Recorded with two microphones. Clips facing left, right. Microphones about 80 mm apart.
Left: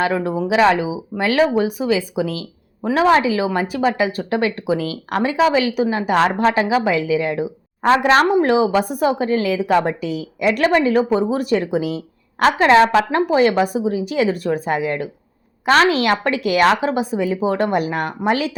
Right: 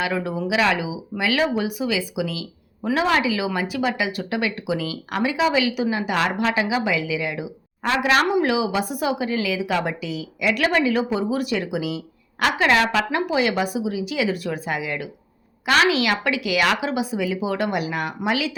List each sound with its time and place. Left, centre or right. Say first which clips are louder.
0.0 s speech: left 5 dB; left
13.1 s speech: left 6 dB; left